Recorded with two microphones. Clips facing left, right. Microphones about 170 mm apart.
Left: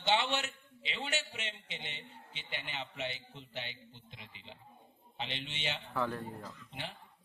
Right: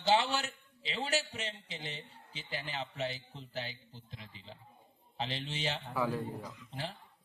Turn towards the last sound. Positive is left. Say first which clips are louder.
# right 4 dB
turn(degrees=-10)  # may be behind; listen again after turning